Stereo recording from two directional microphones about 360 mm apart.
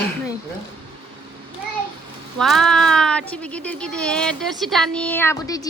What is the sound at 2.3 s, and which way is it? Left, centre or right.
Speech, centre.